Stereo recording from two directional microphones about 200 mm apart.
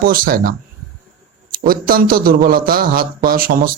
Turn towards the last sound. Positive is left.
turn(degrees=-45)  # may be behind; listen again after turning